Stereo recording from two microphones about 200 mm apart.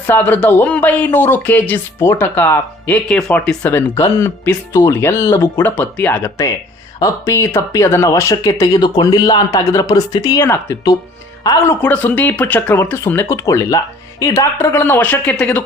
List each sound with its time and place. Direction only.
0.0 s speech: 10° left (ahead or behind)